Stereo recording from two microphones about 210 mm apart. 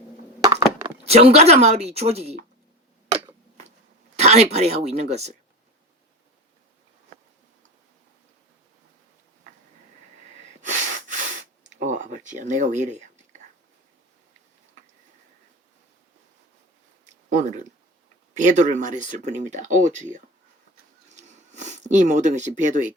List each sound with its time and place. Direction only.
0.4 s a sound: 15° right (ahead or behind)
1.0 s speech: 30° right (ahead or behind)
4.2 s speech: 30° right (ahead or behind)
10.6 s sniff: 35° right (ahead or behind)
17.2 s speech: 35° right (ahead or behind)